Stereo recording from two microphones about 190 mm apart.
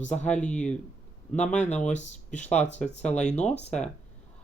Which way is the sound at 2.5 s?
5° left (ahead or behind).